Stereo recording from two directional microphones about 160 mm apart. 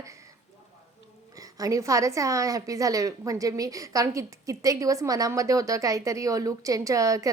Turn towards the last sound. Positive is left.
turn(degrees=-20)  # may be behind; listen again after turning